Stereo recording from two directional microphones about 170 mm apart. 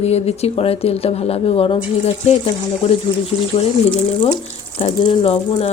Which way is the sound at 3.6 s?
30° left (ahead or behind).